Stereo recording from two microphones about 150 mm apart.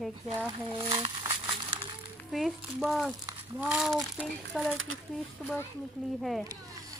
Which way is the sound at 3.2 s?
15° right (ahead or behind).